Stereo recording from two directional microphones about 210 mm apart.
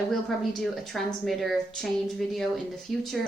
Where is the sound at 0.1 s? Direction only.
Centre (ahead or behind).